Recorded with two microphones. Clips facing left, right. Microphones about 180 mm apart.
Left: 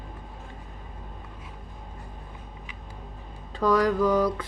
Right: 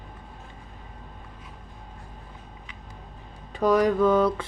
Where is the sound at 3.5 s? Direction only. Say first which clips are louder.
Right 2 dB; 20° right (ahead or behind).